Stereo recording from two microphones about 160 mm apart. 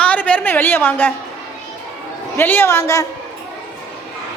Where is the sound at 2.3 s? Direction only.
15° left (ahead or behind).